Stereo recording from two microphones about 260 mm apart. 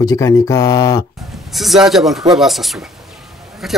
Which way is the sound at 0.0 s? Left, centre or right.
Centre.